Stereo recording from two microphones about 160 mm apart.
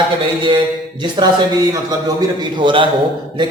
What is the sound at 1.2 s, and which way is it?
A man's voice, 30° right (ahead or behind).